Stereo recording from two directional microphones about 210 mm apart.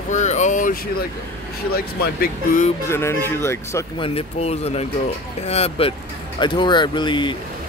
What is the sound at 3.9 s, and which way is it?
Speech, 25° left (ahead or behind).